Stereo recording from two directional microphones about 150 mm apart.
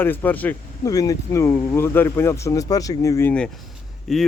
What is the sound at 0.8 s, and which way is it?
Speech, 25° left (ahead or behind).